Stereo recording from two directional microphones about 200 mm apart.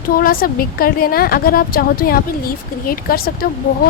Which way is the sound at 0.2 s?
45° left (ahead or behind).